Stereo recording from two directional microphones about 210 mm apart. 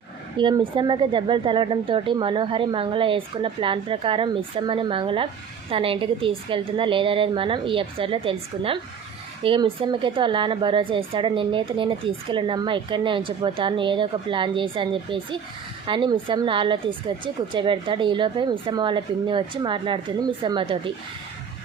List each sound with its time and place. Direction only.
0.3 s a woman's voice: 20° right (ahead or behind)